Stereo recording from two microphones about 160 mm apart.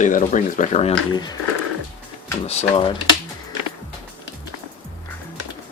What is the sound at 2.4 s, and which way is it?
Speech, 35° left (ahead or behind).